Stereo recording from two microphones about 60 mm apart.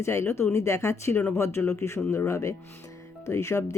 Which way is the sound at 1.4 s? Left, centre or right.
Left.